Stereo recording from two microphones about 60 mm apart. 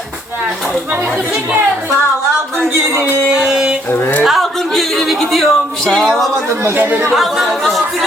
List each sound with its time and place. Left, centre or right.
3.3 s music: centre
4.2 s speech: centre
6.7 s speech: right
7.1 s speech: centre